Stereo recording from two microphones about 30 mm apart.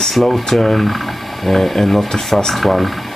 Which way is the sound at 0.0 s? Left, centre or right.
Centre.